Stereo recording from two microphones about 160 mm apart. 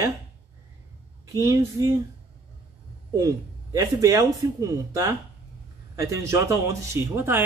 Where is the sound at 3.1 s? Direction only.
20° right (ahead or behind).